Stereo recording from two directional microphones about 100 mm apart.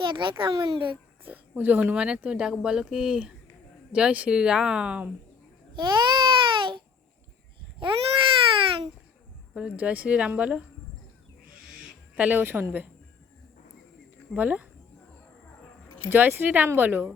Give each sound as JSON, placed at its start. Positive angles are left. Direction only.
{"t": 0.0, "sound": "a child's voice", "side_deg": -55}
{"t": 1.2, "sound": "speech", "side_deg": -20}
{"t": 5.7, "sound": "babbling", "side_deg": -55}
{"t": 7.8, "sound": "baby cry", "side_deg": -60}
{"t": 9.6, "sound": "speech", "side_deg": -15}
{"t": 12.1, "sound": "speech", "side_deg": -15}
{"t": 14.3, "sound": "speech", "side_deg": -15}
{"t": 16.0, "sound": "a woman's voice", "side_deg": -20}